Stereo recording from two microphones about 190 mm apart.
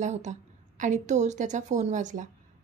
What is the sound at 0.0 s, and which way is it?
A woman's voice, 40° right (ahead or behind).